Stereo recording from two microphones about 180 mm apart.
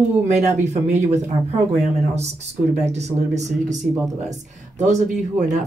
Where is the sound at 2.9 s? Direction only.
40° right (ahead or behind).